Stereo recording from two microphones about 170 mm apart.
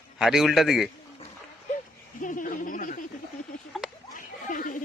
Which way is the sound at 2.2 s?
50° left (ahead or behind).